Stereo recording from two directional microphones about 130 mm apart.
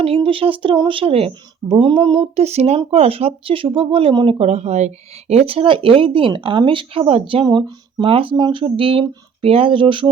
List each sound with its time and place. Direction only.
0.0 s speech: 45° right (ahead or behind)